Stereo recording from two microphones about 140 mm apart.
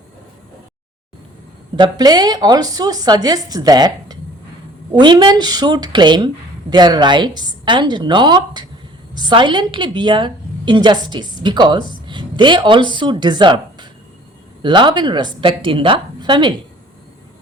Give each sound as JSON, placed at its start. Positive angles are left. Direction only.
{"t": 1.7, "sound": "a woman's voice", "side_deg": -30}